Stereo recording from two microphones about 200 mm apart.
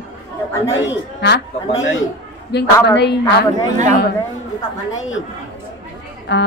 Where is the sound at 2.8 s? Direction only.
60° left (ahead or behind).